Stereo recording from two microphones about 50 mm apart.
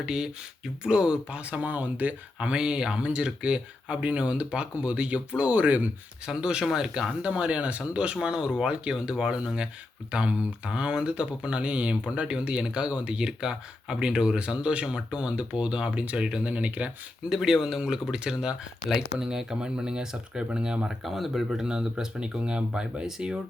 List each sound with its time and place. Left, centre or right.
0.0 s speech: centre; by 2.5 s right
2.5 s speech: centre; by 5.9 s right
6.2 s speech: centre
7.2 s speech: right
17.2 s speech: centre
20.8 s speech: centre